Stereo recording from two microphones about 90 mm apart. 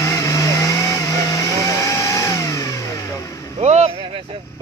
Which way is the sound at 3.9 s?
90° right.